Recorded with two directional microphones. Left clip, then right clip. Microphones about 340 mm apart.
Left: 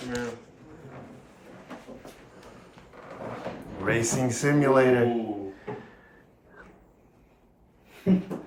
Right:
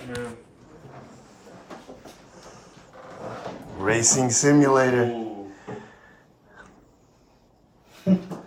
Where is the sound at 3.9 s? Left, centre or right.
Centre.